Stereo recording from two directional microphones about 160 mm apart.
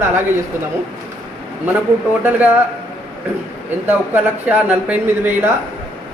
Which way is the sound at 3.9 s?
10° right (ahead or behind).